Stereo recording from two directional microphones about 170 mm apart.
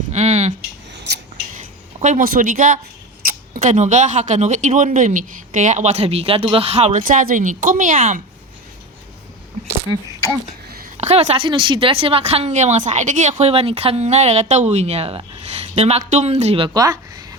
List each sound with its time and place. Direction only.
0.1 s a sound: 40° right (ahead or behind)
1.5 s speech: 45° right (ahead or behind)
10.9 s speech: 40° right (ahead or behind); by 17.2 s 20° right (ahead or behind)